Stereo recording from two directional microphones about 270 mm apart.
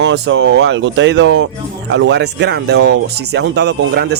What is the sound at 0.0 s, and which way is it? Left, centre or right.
Speech, right.